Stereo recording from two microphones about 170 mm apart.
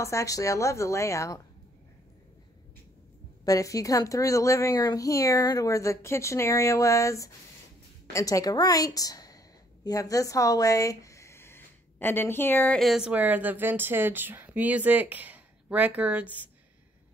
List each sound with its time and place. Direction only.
0.0 s speech: 20° left (ahead or behind)
3.4 s a woman's voice: 20° left (ahead or behind); by 16.4 s 10° right (ahead or behind)